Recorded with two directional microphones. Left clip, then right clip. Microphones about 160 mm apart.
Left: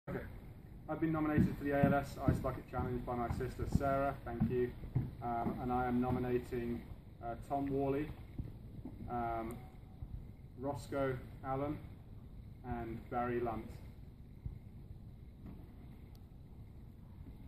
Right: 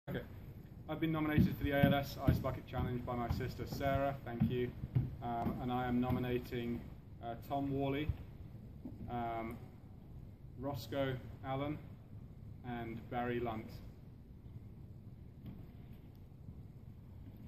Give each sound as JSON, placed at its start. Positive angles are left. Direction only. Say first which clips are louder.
{"t": 0.8, "sound": "speech", "louder": "left 1 dB", "side_deg": -5}
{"t": 9.0, "sound": "speech", "louder": "left 2 dB", "side_deg": -5}
{"t": 10.9, "sound": "speech", "louder": "left 1 dB", "side_deg": -5}